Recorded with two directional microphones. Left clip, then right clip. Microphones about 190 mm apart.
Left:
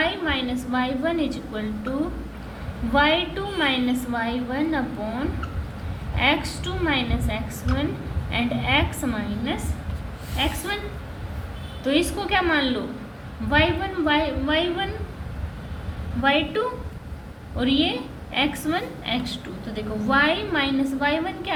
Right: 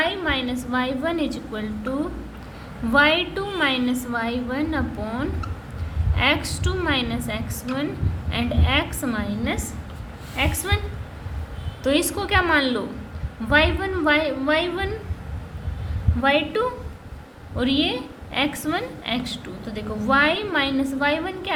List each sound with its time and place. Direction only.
0.0 s a woman's voice: 35° right (ahead or behind)
2.9 s a woman's voice: 25° right (ahead or behind)
10.7 s a woman's voice: 35° right (ahead or behind)
16.2 s a woman's voice: 35° right (ahead or behind)